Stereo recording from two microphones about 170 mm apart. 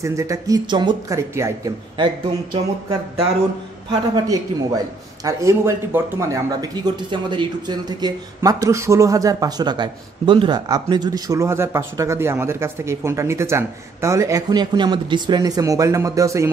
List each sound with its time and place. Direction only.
0.0 s a man's voice: 15° right (ahead or behind)
2.5 s speech: 30° right (ahead or behind)
4.1 s a man's voice: 20° right (ahead or behind)